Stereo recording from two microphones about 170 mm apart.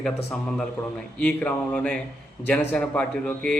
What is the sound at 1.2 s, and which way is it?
Speech, 5° left (ahead or behind).